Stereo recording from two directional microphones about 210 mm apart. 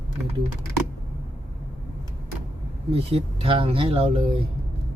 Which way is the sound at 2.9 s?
25° right (ahead or behind).